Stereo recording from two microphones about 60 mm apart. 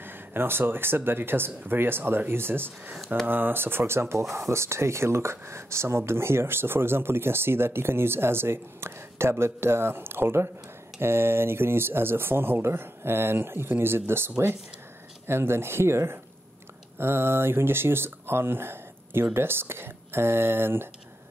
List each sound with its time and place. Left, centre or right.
0.0 s speech: right